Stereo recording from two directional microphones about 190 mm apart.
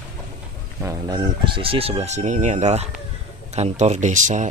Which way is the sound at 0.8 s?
20° right (ahead or behind).